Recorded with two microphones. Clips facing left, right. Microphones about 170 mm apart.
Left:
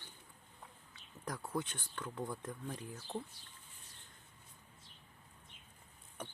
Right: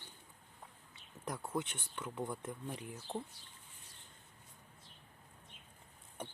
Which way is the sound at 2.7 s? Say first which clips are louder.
Left 1 dB; 10° right (ahead or behind).